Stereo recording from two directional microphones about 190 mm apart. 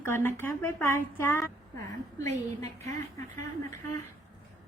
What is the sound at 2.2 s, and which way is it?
Speech, 35° right (ahead or behind).